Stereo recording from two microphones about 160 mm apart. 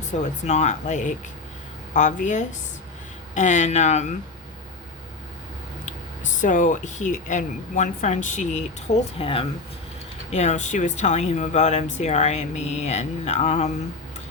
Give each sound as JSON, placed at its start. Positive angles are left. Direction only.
{"t": 0.2, "sound": "speech", "side_deg": 45}
{"t": 5.8, "sound": "speech", "side_deg": 50}
{"t": 9.1, "sound": "speech", "side_deg": 35}